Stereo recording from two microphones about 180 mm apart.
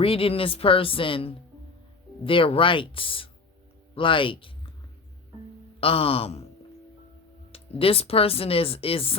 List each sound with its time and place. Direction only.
0.0 s speech: 30° left (ahead or behind)
5.8 s speech: 30° left (ahead or behind)
7.5 s speech: 30° left (ahead or behind)